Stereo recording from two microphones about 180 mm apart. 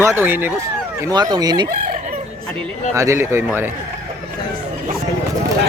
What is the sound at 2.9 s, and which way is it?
Chicken, 15° right (ahead or behind).